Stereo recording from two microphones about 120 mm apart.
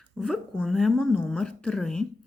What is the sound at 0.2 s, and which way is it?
A woman's voice, 5° left (ahead or behind).